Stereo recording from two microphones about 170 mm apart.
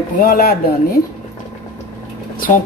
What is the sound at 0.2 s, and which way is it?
Speech, 60° left (ahead or behind).